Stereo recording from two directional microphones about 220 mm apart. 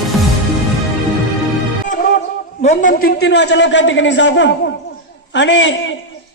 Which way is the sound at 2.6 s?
35° left (ahead or behind).